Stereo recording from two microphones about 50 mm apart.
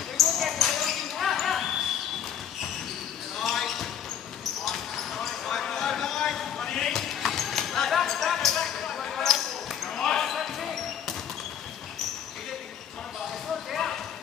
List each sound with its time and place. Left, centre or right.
0.2 s basketball bounce: centre
3.3 s basketball bounce: centre
13.7 s a sound: centre